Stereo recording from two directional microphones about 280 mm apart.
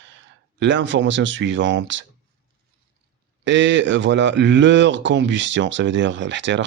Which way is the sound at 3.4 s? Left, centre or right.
Right.